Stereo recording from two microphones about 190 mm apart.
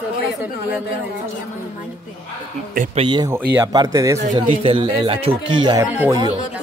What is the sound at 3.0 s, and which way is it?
Speech, 25° right (ahead or behind).